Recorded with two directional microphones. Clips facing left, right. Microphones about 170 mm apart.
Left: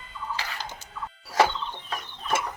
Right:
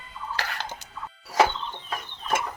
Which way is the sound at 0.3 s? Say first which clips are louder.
Right 6 dB; 65° right (ahead or behind).